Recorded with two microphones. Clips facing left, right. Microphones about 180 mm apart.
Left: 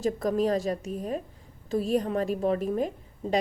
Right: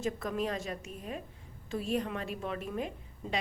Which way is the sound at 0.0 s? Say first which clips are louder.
Left 8 dB; 40° left (ahead or behind).